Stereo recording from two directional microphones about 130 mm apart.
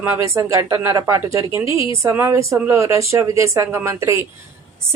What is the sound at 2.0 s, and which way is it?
Speech, 20° right (ahead or behind).